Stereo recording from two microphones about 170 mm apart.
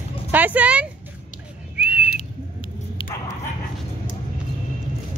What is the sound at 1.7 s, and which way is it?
Whistling, 10° right (ahead or behind).